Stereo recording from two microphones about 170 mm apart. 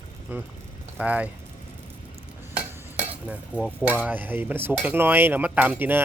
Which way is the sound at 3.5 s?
10° right (ahead or behind).